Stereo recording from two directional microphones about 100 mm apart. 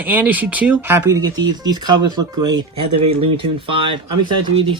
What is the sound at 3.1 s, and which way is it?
Speech, 70° right (ahead or behind).